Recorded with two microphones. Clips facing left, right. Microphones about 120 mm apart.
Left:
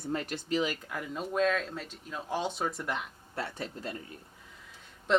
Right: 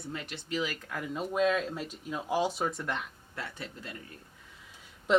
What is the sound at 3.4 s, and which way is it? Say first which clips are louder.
Speech: left 4 dB; 35° left (ahead or behind).